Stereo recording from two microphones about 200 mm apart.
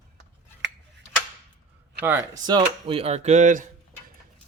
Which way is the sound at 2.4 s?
25° right (ahead or behind).